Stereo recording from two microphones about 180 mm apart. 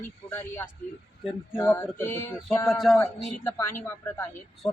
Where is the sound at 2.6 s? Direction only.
Centre (ahead or behind).